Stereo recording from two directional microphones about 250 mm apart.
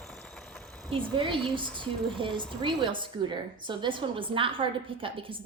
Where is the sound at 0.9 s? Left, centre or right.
Centre.